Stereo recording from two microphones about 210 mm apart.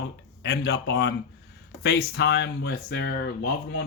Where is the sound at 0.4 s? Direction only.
50° left (ahead or behind).